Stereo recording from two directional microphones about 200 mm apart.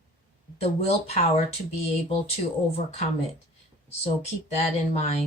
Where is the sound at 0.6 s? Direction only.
30° left (ahead or behind).